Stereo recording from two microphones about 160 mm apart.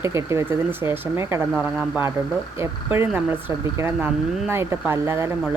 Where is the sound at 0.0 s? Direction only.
20° right (ahead or behind).